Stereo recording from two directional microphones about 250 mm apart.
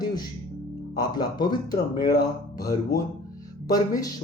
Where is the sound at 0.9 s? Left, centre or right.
Centre.